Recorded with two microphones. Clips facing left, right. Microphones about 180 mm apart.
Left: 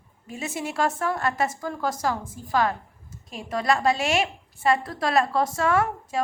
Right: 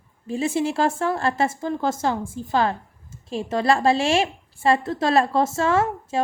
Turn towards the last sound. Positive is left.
turn(degrees=-25)  # may be behind; listen again after turning